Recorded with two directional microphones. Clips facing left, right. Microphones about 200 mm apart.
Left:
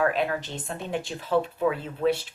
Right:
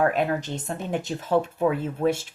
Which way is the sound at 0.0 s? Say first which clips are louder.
Right 2 dB; 45° right (ahead or behind).